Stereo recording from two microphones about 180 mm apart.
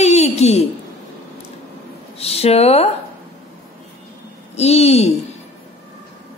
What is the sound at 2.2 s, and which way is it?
Speech, 35° left (ahead or behind).